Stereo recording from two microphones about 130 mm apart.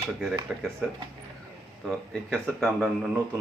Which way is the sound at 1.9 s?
5° left (ahead or behind).